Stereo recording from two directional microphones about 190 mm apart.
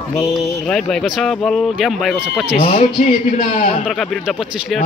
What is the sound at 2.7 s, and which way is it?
Speech, 40° left (ahead or behind).